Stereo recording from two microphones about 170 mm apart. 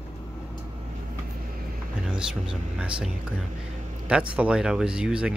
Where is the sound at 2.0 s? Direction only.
5° right (ahead or behind).